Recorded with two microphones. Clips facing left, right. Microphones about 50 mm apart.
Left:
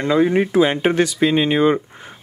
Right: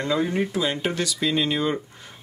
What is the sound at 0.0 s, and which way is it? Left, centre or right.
Speech, left.